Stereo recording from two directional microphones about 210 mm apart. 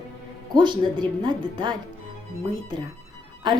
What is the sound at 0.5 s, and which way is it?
A woman's voice, 20° right (ahead or behind).